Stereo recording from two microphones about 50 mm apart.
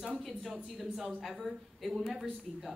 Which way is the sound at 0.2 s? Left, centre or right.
Centre.